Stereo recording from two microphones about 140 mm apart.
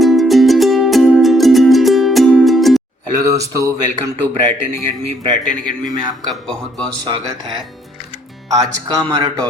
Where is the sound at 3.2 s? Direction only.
25° right (ahead or behind).